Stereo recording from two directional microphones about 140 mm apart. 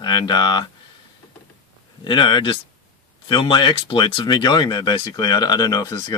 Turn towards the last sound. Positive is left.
turn(degrees=25)  # may be behind; listen again after turning